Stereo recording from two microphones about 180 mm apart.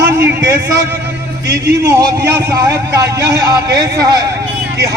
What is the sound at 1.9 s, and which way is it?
A man's voice, 15° right (ahead or behind).